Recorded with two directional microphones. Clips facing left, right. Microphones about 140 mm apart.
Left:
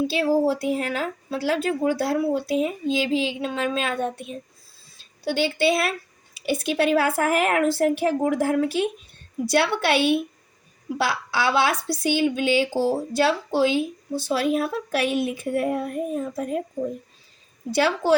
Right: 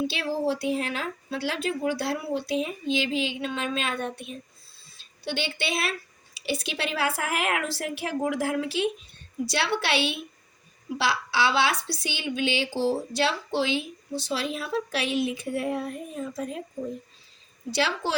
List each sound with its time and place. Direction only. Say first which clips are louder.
0.1 s a woman's voice: left 7 dB; 40° left (ahead or behind)
17.7 s a woman's voice: left 5 dB; 50° left (ahead or behind)